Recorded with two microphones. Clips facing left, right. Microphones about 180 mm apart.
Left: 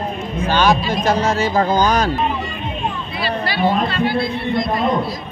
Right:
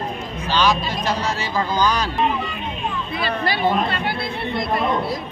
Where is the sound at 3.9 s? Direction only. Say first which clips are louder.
Left 6 dB; 60° right (ahead or behind).